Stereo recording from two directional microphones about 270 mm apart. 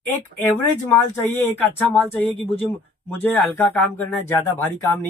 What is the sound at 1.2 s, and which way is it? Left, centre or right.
Speech, centre.